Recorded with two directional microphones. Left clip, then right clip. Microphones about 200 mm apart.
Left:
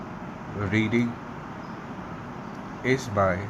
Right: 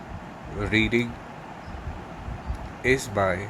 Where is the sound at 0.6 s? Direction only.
25° right (ahead or behind).